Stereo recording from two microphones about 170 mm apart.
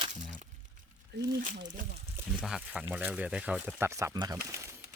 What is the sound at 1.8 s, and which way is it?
Speech, 50° right (ahead or behind).